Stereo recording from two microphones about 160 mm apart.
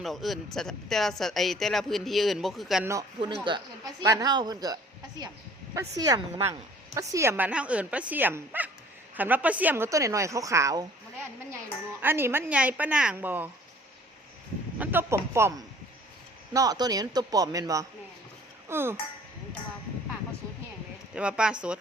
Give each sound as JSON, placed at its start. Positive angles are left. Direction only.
{"t": 0.0, "sound": "speech", "side_deg": 0}
{"t": 3.4, "sound": "a woman's voice", "side_deg": -25}
{"t": 12.0, "sound": "a woman's voice", "side_deg": -15}
{"t": 14.8, "sound": "a woman's voice", "side_deg": -10}
{"t": 21.2, "sound": "a woman's voice", "side_deg": -5}